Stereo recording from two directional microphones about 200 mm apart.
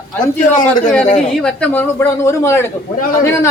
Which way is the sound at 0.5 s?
40° left (ahead or behind).